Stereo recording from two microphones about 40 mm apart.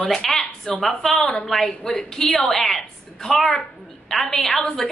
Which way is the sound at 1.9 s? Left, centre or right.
Left.